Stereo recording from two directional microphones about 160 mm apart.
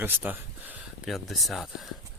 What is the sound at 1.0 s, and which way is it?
Speech, centre (ahead or behind).